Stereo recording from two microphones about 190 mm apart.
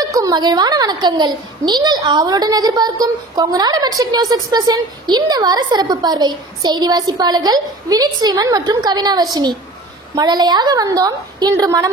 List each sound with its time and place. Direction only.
0.1 s a child's voice: 20° right (ahead or behind)